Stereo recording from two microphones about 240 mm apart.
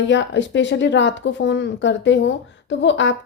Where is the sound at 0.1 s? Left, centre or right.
Left.